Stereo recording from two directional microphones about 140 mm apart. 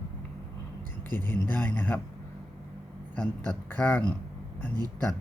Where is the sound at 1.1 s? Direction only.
15° left (ahead or behind).